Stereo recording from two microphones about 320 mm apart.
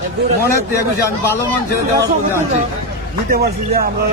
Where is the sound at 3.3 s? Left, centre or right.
Right.